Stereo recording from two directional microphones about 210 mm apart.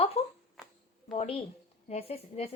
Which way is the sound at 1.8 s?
30° left (ahead or behind).